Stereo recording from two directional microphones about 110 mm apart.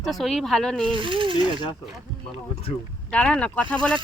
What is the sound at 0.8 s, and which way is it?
Speech, 50° right (ahead or behind).